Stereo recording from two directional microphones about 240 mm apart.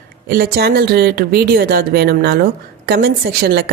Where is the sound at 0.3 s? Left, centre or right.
Right.